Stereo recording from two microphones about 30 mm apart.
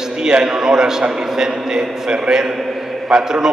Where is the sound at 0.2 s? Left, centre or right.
Right.